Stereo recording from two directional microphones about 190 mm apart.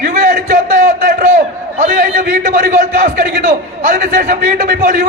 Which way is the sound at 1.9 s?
60° right (ahead or behind).